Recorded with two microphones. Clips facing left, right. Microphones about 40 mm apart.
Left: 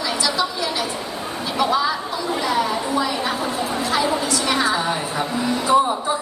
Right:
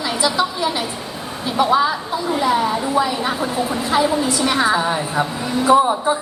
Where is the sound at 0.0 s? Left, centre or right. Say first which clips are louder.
Right 3 dB; centre.